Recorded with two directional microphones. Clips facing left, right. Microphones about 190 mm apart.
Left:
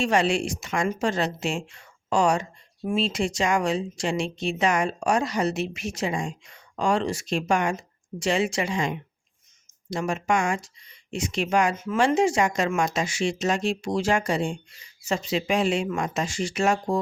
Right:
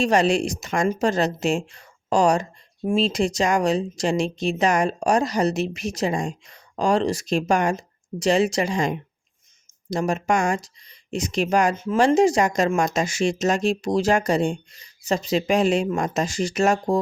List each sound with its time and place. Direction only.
0.0 s speech: 40° right (ahead or behind)